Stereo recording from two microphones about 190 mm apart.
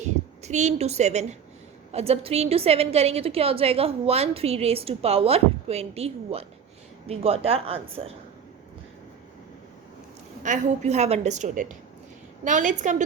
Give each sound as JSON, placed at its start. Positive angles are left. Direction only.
{"t": 0.0, "sound": "a woman's voice", "side_deg": -35}
{"t": 10.4, "sound": "a woman's voice", "side_deg": -40}